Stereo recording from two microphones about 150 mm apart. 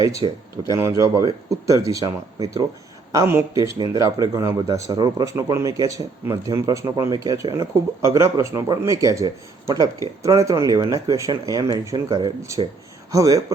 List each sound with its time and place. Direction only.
0.2 s speech: 35° right (ahead or behind)
0.7 s speech: 20° right (ahead or behind)